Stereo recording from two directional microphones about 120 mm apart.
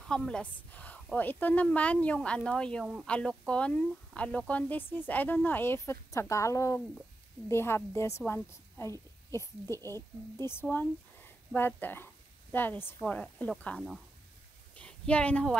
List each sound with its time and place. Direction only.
0.1 s speech: 5° left (ahead or behind)
2.8 s speech: 5° right (ahead or behind)
3.1 s a woman's voice: 10° left (ahead or behind)
14.8 s a sound: 10° left (ahead or behind)